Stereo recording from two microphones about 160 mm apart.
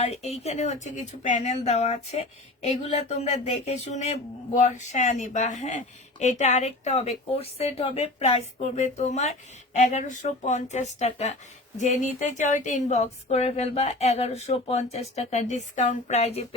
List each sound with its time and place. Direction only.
0.0 s speech: 40° left (ahead or behind)